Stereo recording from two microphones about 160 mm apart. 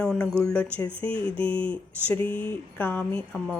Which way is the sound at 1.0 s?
30° right (ahead or behind).